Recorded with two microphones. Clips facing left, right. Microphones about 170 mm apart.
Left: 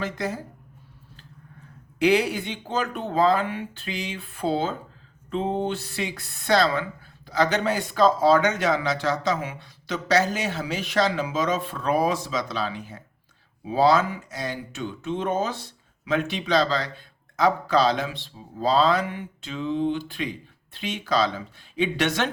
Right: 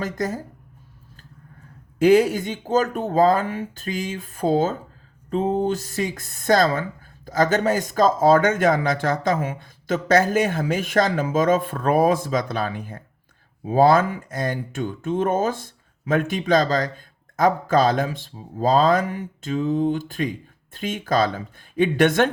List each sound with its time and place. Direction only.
0.0 s speech: 45° right (ahead or behind)
2.0 s speech: 45° right (ahead or behind)